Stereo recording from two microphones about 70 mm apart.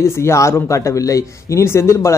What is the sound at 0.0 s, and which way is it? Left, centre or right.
A man's voice, left.